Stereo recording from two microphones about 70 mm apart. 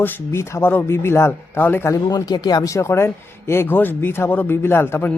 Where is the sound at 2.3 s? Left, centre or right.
Left.